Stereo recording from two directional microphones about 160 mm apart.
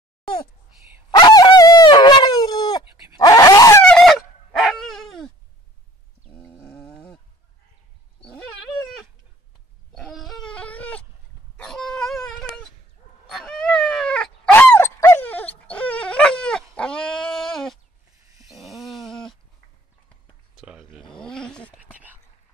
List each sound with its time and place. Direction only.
1.1 s dog: 25° left (ahead or behind)
3.2 s a sound: 20° left (ahead or behind)
3.8 s dog: 5° left (ahead or behind)
6.6 s snoring: 10° left (ahead or behind)
9.9 s a sound: centre (ahead or behind)
11.5 s dog: 5° left (ahead or behind)
16.7 s sheep: 5° left (ahead or behind)
18.5 s dog: centre (ahead or behind)
20.5 s a sound: centre (ahead or behind)
21.9 s whispering: 10° right (ahead or behind)